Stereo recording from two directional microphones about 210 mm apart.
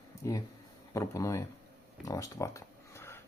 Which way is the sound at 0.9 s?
15° left (ahead or behind).